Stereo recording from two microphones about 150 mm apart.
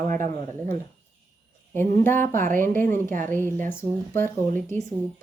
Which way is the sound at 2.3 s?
60° right (ahead or behind).